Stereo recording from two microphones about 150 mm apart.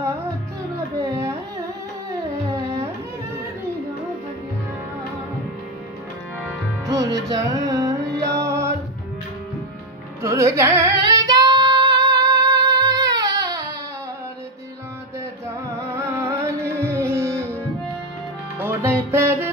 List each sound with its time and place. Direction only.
2.5 s carnatic music: 20° right (ahead or behind)
6.9 s music: 25° right (ahead or behind)
10.2 s female singing: 20° right (ahead or behind)
15.9 s music: 20° right (ahead or behind)
18.6 s music: 15° right (ahead or behind)